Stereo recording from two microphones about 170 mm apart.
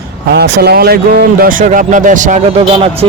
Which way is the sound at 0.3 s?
75° right (ahead or behind).